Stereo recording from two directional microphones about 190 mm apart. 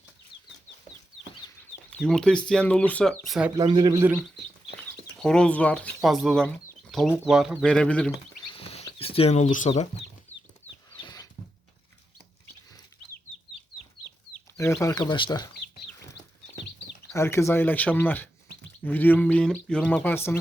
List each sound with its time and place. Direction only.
1.9 s speech: 5° left (ahead or behind)
3.5 s speech: 25° right (ahead or behind)
4.8 s speech: 5° left (ahead or behind)
8.5 s rodents: 30° left (ahead or behind)
10.3 s chicken: 10° left (ahead or behind)
10.9 s a sound: 20° left (ahead or behind)
14.6 s speech: 15° left (ahead or behind)
17.1 s speech: 15° left (ahead or behind)